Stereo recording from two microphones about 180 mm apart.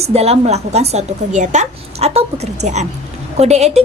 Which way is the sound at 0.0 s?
35° right (ahead or behind).